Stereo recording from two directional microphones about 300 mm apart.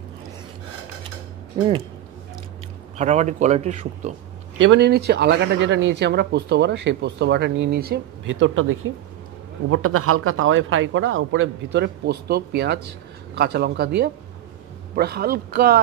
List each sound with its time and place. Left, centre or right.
3.0 s a man's voice: right
4.6 s a man's voice: right